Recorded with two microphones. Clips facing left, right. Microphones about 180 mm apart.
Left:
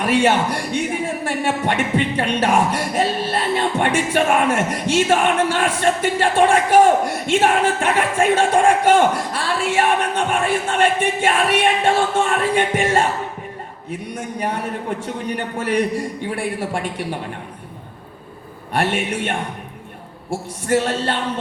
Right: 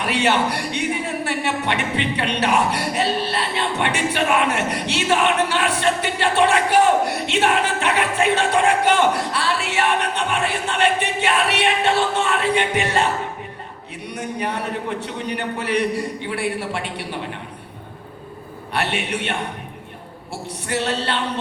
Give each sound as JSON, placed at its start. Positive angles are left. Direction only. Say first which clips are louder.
{"t": 0.0, "sound": "music", "louder": "left 3 dB", "side_deg": 45}
{"t": 1.2, "sound": "speech", "louder": "left 2 dB", "side_deg": 45}
{"t": 10.7, "sound": "music", "louder": "left 1 dB", "side_deg": 50}
{"t": 14.3, "sound": "music", "louder": "left 2 dB", "side_deg": 45}
{"t": 18.7, "sound": "music", "louder": "left 3 dB", "side_deg": 50}
{"t": 20.7, "sound": "music", "louder": "left 4 dB", "side_deg": 45}